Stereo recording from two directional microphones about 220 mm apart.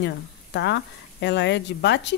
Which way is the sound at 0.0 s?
50° left (ahead or behind).